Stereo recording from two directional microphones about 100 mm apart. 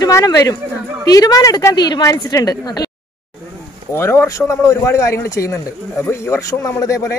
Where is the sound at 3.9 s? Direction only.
25° left (ahead or behind).